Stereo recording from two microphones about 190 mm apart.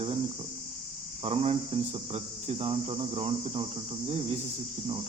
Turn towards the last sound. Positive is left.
turn(degrees=-35)  # may be behind; listen again after turning